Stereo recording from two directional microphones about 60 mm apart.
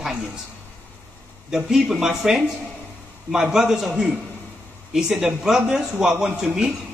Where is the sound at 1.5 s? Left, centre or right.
Centre.